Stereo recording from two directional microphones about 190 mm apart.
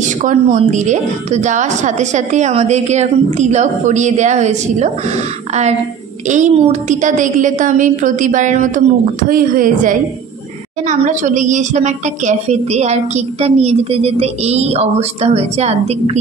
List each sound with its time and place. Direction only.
0.0 s a woman's voice: 40° right (ahead or behind)